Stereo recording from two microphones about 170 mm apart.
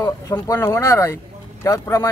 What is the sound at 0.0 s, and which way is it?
Speech, 20° left (ahead or behind).